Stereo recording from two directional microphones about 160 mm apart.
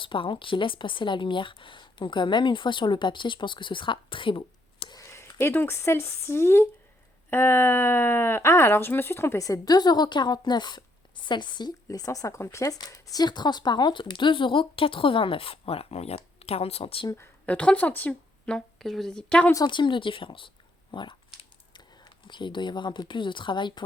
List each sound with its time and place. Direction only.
0.0 s speech: 30° left (ahead or behind)
17.4 s a woman's voice: 10° left (ahead or behind)
19.5 s speech: 30° left (ahead or behind)